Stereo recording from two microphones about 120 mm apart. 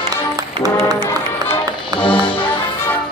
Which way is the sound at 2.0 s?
45° left (ahead or behind).